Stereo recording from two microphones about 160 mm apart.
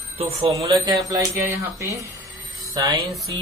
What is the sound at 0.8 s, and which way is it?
Speech, 25° right (ahead or behind).